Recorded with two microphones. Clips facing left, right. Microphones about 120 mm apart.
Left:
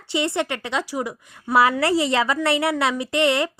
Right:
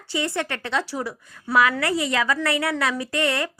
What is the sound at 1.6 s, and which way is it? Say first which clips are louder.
A woman's voice: left 3 dB; 30° left (ahead or behind).